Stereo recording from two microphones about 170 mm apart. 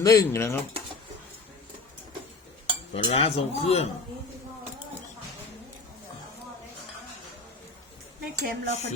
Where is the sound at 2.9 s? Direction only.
35° left (ahead or behind).